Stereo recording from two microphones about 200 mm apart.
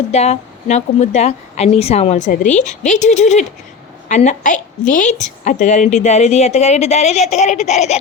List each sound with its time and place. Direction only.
0.1 s a woman's voice: 35° left (ahead or behind)